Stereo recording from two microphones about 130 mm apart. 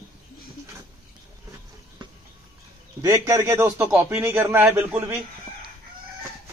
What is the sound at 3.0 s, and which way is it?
A man's voice, 25° right (ahead or behind).